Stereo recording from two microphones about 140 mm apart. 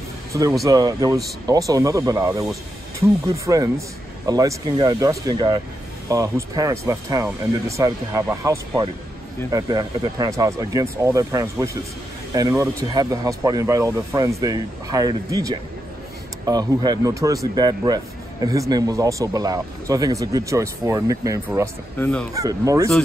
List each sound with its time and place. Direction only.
0.3 s speech: 25° right (ahead or behind)
21.9 s speech: 10° left (ahead or behind)
22.3 s speech: 25° right (ahead or behind)